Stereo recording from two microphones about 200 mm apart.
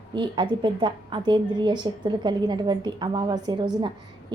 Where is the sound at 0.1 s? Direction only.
25° right (ahead or behind).